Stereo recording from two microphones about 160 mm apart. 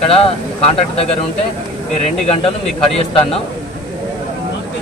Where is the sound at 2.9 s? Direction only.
35° left (ahead or behind).